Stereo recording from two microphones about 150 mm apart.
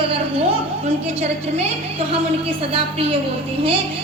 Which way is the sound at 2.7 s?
40° right (ahead or behind).